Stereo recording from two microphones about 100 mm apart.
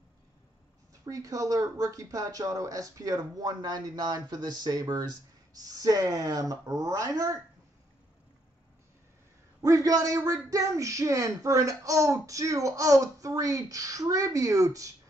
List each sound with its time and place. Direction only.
1.0 s speech: 35° right (ahead or behind)
9.6 s speech: 35° right (ahead or behind)